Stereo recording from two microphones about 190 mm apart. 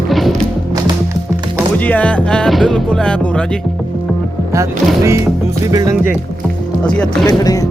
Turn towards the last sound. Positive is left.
turn(degrees=20)  # may be behind; listen again after turning